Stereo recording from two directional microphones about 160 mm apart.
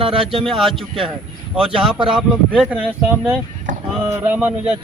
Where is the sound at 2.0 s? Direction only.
Centre (ahead or behind).